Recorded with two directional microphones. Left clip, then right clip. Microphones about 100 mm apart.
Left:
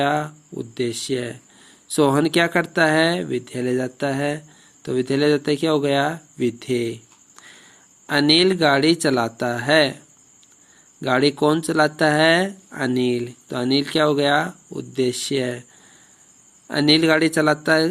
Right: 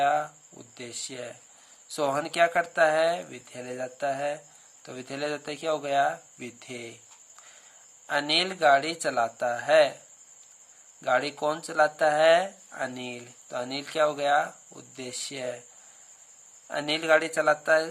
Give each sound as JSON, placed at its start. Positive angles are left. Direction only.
{"t": 0.0, "sound": "speech", "side_deg": 25}
{"t": 11.0, "sound": "speech", "side_deg": 25}
{"t": 16.6, "sound": "speech", "side_deg": 25}